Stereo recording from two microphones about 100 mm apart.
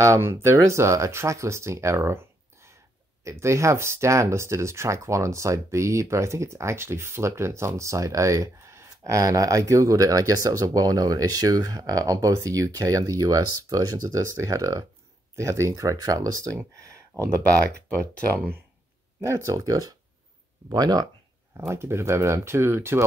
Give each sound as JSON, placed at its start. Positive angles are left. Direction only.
{"t": 0.0, "sound": "speech", "side_deg": -25}
{"t": 3.3, "sound": "speech", "side_deg": -30}
{"t": 19.2, "sound": "speech", "side_deg": -30}
{"t": 21.5, "sound": "speech", "side_deg": -25}